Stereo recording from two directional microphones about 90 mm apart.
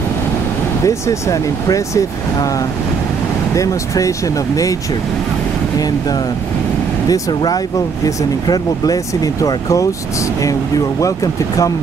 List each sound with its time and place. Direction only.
0.8 s speech: 35° left (ahead or behind)
3.5 s speech: 40° left (ahead or behind)
5.8 s speech: 45° left (ahead or behind)
11.0 s speech: 40° left (ahead or behind)